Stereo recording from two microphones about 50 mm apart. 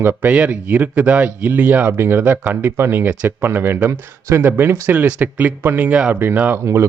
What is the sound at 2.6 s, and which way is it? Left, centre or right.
Speech, right.